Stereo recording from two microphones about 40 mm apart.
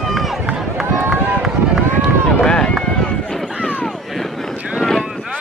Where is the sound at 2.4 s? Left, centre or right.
Centre.